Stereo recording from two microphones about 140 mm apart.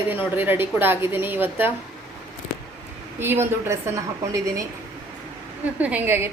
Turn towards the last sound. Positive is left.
turn(degrees=-15)  # may be behind; listen again after turning